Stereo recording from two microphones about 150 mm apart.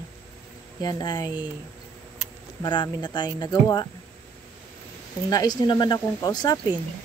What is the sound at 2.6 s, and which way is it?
Speech, 30° left (ahead or behind).